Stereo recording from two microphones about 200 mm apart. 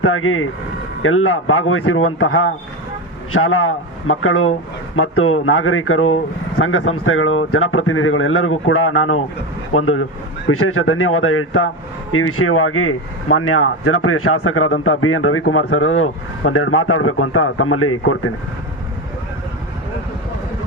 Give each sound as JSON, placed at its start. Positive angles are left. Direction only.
{"t": 0.0, "sound": "speech", "side_deg": 90}